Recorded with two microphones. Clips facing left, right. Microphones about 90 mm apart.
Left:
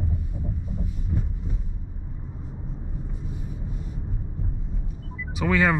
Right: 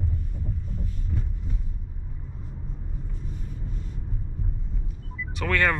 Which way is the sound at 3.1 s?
10° left (ahead or behind).